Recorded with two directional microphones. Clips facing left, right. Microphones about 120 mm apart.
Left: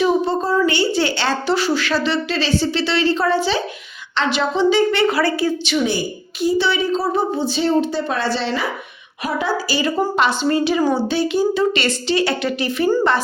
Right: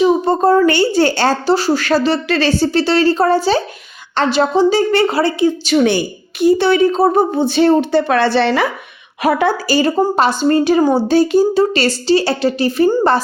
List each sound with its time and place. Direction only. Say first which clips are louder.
0.3 s a woman's voice: right 6 dB; 55° right (ahead or behind)
2.2 s a woman's voice: right 5 dB; 55° right (ahead or behind); by 5.5 s 25° right (ahead or behind)
5.7 s a woman's voice: right 8 dB; 45° right (ahead or behind)
6.4 s a woman's voice: right 7 dB; 55° right (ahead or behind); by 12.9 s 35° right (ahead or behind)